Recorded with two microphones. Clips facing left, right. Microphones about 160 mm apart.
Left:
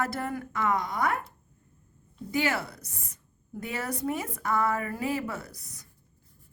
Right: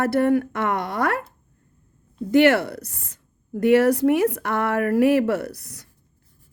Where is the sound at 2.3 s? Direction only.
70° right (ahead or behind).